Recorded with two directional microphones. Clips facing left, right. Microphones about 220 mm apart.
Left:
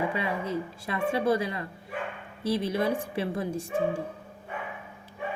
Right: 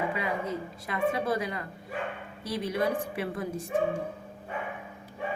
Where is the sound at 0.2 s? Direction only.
30° left (ahead or behind).